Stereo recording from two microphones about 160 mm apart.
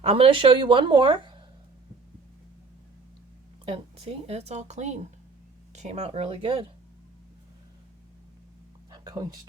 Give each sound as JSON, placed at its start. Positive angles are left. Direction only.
{"t": 0.0, "sound": "speech", "side_deg": -35}
{"t": 3.7, "sound": "speech", "side_deg": -40}
{"t": 8.9, "sound": "a sound", "side_deg": -25}